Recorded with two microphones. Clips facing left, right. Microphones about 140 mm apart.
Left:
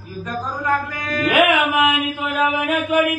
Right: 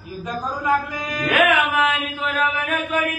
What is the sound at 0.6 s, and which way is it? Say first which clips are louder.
Speech: right 1 dB; 10° right (ahead or behind).